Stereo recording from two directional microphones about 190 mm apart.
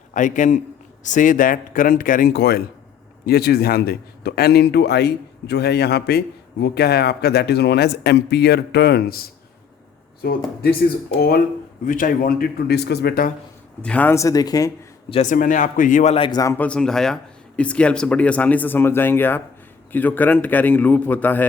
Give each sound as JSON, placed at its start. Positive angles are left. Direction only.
{"t": 0.1, "sound": "a man's voice", "side_deg": 40}
{"t": 10.2, "sound": "a man's voice", "side_deg": 55}
{"t": 13.8, "sound": "speech", "side_deg": 10}
{"t": 15.1, "sound": "a man's voice", "side_deg": 40}